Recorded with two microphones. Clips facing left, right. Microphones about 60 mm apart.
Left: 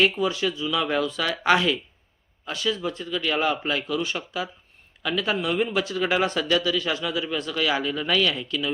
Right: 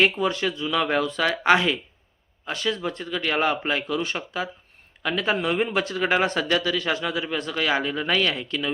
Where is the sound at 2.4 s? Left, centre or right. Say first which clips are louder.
Even; right.